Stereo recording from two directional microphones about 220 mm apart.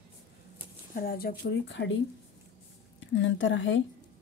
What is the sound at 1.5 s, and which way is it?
Speech, 55° left (ahead or behind).